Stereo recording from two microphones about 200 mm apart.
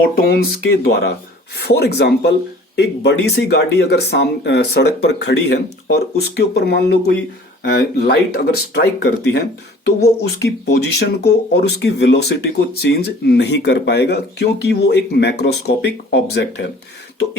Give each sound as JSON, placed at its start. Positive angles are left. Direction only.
{"t": 0.2, "sound": "speech", "side_deg": 50}